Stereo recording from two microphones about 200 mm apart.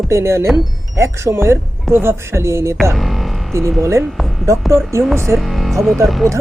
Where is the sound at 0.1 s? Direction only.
15° right (ahead or behind).